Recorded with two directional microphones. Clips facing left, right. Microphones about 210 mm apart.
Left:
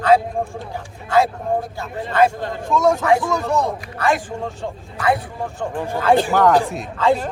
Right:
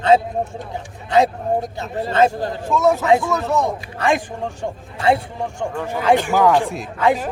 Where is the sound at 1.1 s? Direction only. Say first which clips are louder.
Right 1 dB; 20° right (ahead or behind).